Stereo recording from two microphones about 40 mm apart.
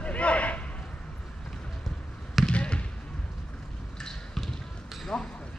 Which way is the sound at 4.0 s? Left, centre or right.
Centre.